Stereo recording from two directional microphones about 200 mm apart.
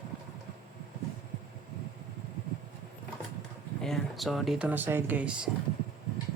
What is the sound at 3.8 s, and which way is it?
Speech, centre (ahead or behind).